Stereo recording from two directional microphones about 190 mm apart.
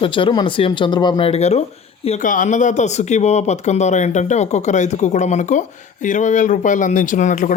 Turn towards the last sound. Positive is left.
turn(degrees=40)  # may be behind; listen again after turning